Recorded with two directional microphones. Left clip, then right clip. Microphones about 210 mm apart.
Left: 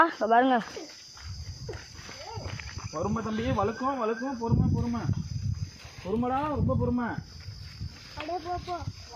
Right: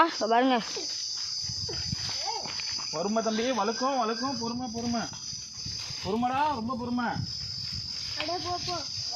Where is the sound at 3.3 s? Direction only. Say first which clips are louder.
Right 2 dB; 15° right (ahead or behind).